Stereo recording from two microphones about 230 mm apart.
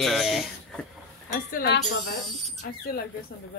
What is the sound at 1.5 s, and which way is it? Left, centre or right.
Speech, left.